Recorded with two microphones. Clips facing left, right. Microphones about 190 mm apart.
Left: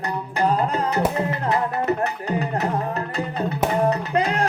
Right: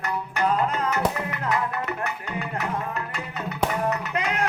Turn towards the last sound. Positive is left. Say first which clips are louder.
# left 6 dB
turn(degrees=35)  # may be behind; listen again after turning